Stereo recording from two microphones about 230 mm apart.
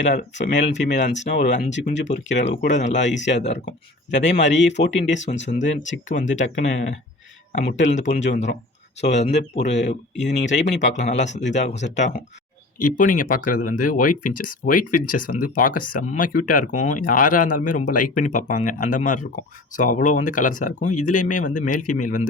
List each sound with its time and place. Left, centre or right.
0.0 s speech: left
0.5 s speech: left
1.4 s speech: left
3.1 s speech: left
3.3 s speech: left
4.5 s speech: left
5.0 s speech: left